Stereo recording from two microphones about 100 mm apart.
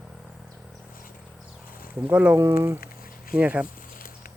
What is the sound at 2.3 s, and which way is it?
Speech, 30° right (ahead or behind).